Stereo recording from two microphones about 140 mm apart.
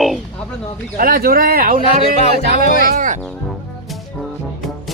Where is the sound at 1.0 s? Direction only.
90° right.